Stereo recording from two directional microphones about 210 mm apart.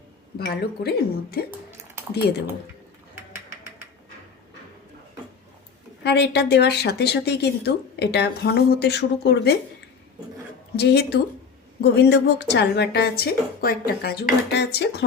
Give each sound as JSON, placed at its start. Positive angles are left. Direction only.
{"t": 0.3, "sound": "a woman's voice", "side_deg": 50}
{"t": 6.0, "sound": "a woman's voice", "side_deg": 50}
{"t": 10.8, "sound": "a woman's voice", "side_deg": 50}